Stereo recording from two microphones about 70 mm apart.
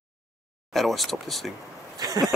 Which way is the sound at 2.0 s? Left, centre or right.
Right.